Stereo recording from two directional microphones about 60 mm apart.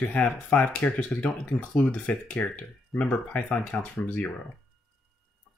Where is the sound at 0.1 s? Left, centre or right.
Left.